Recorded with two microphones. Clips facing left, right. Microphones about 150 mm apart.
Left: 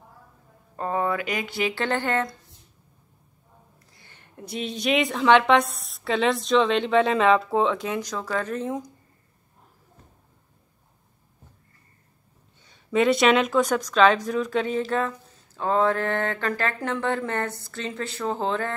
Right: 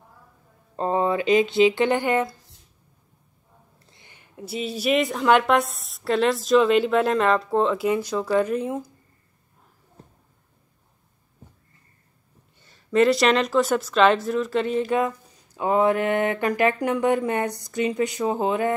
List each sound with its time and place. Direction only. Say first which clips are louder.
0.7 s speech: right 3 dB; 25° right (ahead or behind)
3.9 s a sound: right 2 dB; 15° right (ahead or behind)
4.4 s a woman's voice: right 2 dB; 5° right (ahead or behind)
12.7 s a woman's voice: right 2 dB; centre (ahead or behind)
14.8 s mantra: right 3 dB; 10° right (ahead or behind)